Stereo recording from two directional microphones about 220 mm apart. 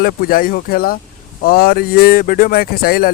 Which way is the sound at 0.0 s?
40° left (ahead or behind).